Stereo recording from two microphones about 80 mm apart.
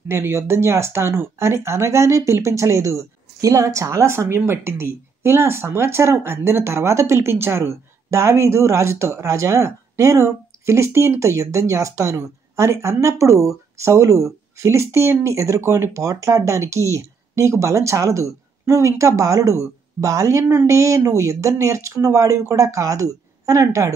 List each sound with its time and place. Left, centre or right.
0.1 s a woman's voice: right